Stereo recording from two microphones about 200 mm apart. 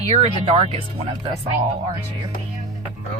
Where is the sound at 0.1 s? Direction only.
30° right (ahead or behind).